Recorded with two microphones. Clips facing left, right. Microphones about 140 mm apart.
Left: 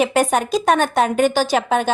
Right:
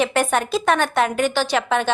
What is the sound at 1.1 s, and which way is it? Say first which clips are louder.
Speech: left 4 dB; 45° left (ahead or behind).